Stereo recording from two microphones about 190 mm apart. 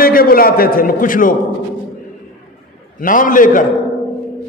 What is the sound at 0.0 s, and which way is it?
A man's voice, 50° left (ahead or behind).